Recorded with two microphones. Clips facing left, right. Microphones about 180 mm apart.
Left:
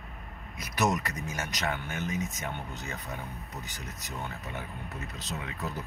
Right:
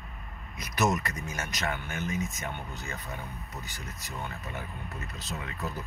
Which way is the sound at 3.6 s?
15° left (ahead or behind).